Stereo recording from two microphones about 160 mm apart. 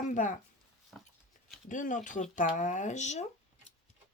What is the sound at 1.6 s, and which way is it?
Speech, 55° left (ahead or behind).